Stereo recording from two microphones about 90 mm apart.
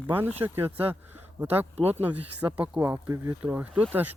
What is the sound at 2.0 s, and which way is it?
Speech, 15° right (ahead or behind).